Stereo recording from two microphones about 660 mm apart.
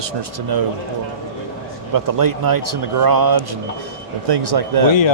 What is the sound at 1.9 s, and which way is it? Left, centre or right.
Speech, right.